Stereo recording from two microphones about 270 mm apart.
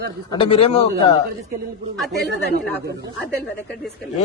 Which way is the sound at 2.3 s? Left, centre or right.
Right.